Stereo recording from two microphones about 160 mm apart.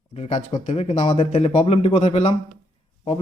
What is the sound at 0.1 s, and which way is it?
Speech, 40° left (ahead or behind).